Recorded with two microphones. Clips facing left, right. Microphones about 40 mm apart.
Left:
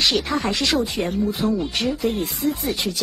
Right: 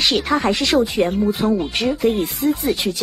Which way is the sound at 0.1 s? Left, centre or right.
Right.